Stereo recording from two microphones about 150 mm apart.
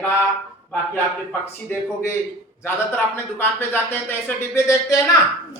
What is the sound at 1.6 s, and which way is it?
Speech, 15° left (ahead or behind).